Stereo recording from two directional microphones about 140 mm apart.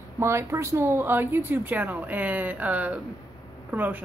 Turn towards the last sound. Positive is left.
turn(degrees=-10)  # may be behind; listen again after turning